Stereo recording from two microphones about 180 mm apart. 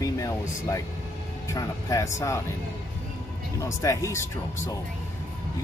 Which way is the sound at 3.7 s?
15° left (ahead or behind).